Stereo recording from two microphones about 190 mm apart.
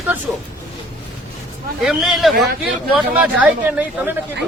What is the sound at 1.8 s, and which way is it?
A man's voice, centre (ahead or behind).